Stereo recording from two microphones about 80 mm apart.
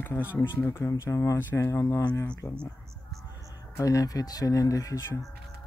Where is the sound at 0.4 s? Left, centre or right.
Left.